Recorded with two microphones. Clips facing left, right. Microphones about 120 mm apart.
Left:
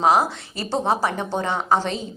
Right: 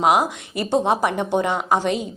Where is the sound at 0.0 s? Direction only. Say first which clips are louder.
Even; 15° right (ahead or behind).